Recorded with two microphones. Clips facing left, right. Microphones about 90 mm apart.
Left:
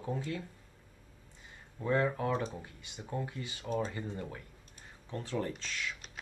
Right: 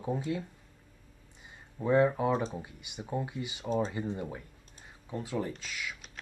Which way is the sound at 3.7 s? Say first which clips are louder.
Right 4 dB; 30° right (ahead or behind).